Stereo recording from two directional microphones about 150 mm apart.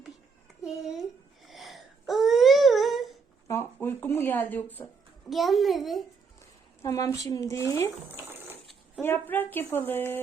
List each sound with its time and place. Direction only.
0.6 s a sound: 5° right (ahead or behind)
3.4 s speech: 15° left (ahead or behind)
5.3 s a child's voice: centre (ahead or behind)
6.8 s speech: 20° left (ahead or behind)
9.0 s speech: 15° left (ahead or behind)